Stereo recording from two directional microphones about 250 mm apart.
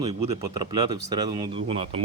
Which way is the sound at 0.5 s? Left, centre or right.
Centre.